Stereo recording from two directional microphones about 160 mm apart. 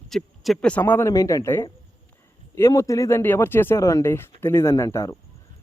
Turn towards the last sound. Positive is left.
turn(degrees=20)  # may be behind; listen again after turning